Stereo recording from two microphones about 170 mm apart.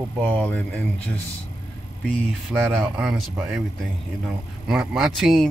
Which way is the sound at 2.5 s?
10° right (ahead or behind).